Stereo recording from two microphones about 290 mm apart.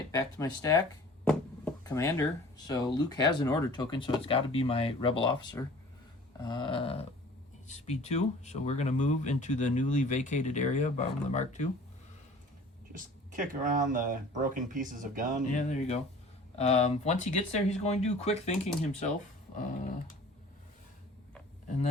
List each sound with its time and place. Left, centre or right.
0.1 s speech: centre
1.3 s a sound: centre
2.6 s speech: centre
12.9 s speech: right
15.5 s speech: left